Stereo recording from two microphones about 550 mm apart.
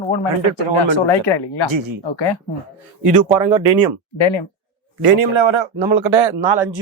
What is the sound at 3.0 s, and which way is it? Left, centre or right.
Speech, right.